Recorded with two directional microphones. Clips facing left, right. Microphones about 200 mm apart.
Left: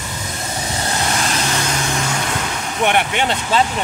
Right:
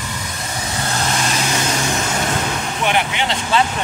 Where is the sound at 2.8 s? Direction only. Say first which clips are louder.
Left 3 dB; 50° left (ahead or behind).